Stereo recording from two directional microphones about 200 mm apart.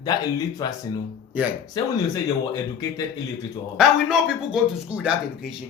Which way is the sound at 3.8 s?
Centre (ahead or behind).